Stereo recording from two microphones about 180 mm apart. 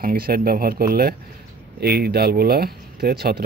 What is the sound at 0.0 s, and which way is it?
Speech, 55° right (ahead or behind).